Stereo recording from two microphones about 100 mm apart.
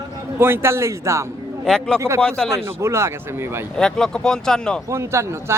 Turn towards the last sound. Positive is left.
turn(degrees=-30)  # may be behind; listen again after turning